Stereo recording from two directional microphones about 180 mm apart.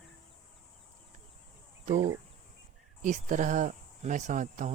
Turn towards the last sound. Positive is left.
turn(degrees=-45)  # may be behind; listen again after turning